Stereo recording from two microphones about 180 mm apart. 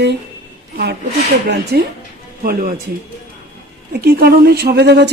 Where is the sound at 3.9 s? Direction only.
55° right (ahead or behind).